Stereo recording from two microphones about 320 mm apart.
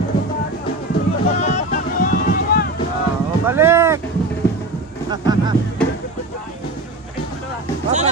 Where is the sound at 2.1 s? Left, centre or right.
Left.